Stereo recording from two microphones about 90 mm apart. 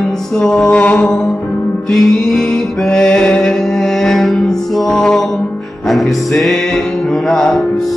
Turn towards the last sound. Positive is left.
turn(degrees=5)  # may be behind; listen again after turning